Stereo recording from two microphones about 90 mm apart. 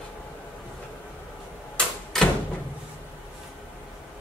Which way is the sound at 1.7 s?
5° left (ahead or behind).